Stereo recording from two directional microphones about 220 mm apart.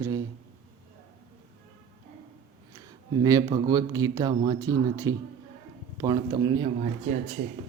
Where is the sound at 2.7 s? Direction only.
15° right (ahead or behind).